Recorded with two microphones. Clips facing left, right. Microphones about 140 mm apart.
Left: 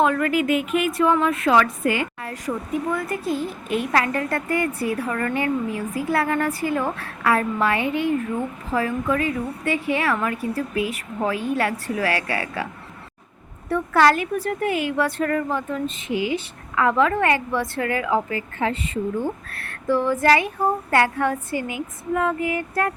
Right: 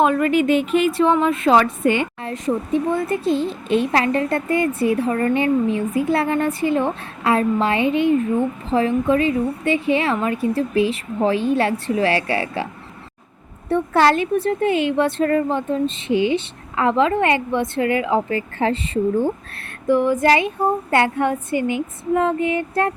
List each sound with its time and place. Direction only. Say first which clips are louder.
0.0 s a woman's voice: right 3 dB; 20° right (ahead or behind)
13.7 s a woman's voice: right 2 dB; 25° right (ahead or behind)